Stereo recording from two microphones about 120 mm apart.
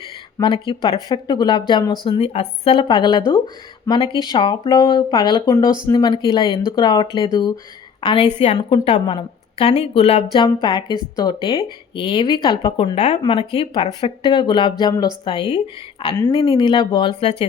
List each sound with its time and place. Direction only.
0.7 s a woman's voice: 45° left (ahead or behind)
2.0 s speech: 55° left (ahead or behind)
2.7 s a woman's voice: 40° left (ahead or behind); by 10.2 s 55° left (ahead or behind)
10.3 s a woman's voice: 35° left (ahead or behind)
16.1 s a woman's voice: 30° left (ahead or behind); by 17.3 s 50° left (ahead or behind)